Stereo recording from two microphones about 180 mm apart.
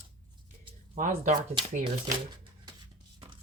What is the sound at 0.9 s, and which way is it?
Speech, 45° right (ahead or behind).